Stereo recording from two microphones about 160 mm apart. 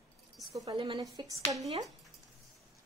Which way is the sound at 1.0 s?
20° right (ahead or behind).